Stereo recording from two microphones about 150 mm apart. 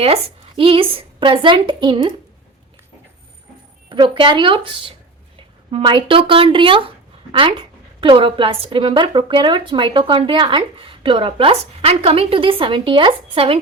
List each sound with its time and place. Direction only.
0.0 s a woman's voice: 40° right (ahead or behind)
3.8 s a woman's voice: 30° right (ahead or behind)
8.0 s a woman's voice: 35° right (ahead or behind)